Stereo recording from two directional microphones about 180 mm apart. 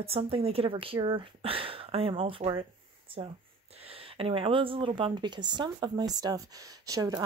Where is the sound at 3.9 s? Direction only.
30° right (ahead or behind).